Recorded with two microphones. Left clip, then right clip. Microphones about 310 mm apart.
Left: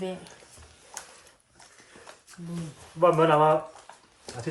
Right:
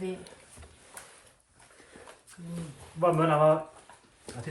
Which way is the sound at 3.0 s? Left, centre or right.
Left.